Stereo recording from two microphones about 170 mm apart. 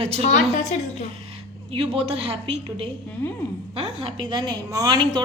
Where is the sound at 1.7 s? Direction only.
35° right (ahead or behind).